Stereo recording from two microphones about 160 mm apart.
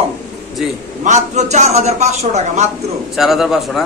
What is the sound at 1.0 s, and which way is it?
A man's voice, 45° right (ahead or behind).